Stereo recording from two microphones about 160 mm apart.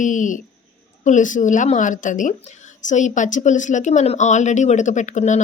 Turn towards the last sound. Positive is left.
turn(degrees=50)  # may be behind; listen again after turning